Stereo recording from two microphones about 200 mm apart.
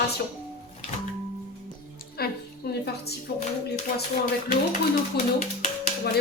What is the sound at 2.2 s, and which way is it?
Speech, 50° left (ahead or behind).